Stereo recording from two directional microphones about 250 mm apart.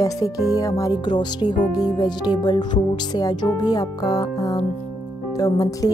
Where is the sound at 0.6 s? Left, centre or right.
Centre.